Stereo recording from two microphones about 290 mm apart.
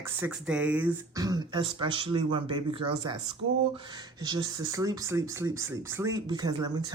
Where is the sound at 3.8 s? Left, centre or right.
Centre.